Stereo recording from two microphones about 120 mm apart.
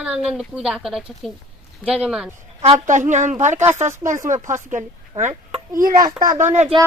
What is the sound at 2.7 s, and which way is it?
Speech, 90° right.